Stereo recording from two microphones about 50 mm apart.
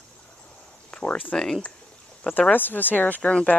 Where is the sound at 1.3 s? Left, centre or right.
Centre.